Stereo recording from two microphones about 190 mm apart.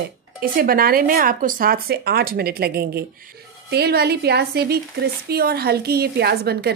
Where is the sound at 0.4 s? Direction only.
50° right (ahead or behind).